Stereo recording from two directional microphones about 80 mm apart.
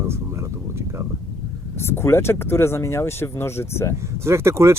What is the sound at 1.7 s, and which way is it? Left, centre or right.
Speech, left.